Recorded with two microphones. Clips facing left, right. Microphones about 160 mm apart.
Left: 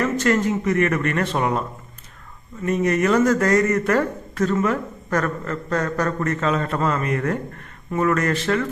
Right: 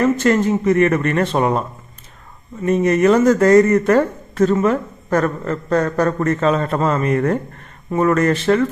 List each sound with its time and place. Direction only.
0.0 s speech: 25° right (ahead or behind)
2.6 s speech: 25° right (ahead or behind)